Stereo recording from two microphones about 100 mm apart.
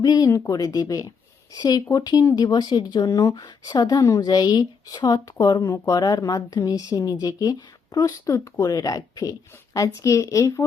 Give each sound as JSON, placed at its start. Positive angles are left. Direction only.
{"t": 0.0, "sound": "a woman's voice", "side_deg": 40}
{"t": 5.7, "sound": "speech", "side_deg": 25}
{"t": 6.0, "sound": "a woman's voice", "side_deg": 40}